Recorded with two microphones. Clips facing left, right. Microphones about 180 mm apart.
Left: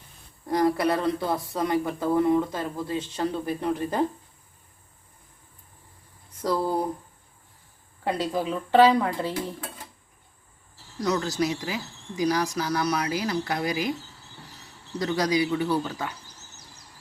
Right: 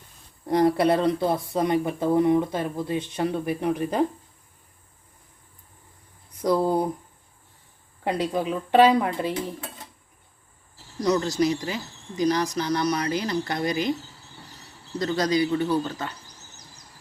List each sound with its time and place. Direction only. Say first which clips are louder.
0.4 s speech: right 3 dB; 25° right (ahead or behind)
6.4 s speech: right 4 dB; 20° right (ahead or behind)
8.0 s speech: right 1 dB; 20° right (ahead or behind)
11.0 s speech: right 3 dB; 5° left (ahead or behind)
14.9 s speech: right 1 dB; 10° left (ahead or behind)